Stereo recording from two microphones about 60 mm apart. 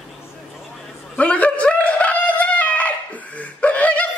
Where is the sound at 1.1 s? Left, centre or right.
Left.